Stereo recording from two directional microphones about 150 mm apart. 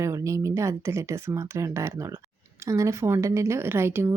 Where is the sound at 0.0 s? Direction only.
20° right (ahead or behind).